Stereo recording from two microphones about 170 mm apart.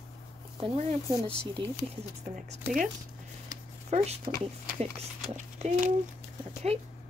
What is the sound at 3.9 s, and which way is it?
Speech, 40° right (ahead or behind).